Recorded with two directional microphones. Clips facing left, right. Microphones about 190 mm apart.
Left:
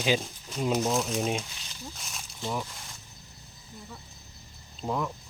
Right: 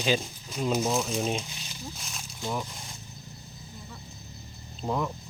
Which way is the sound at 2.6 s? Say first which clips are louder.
Right 3 dB; 20° right (ahead or behind).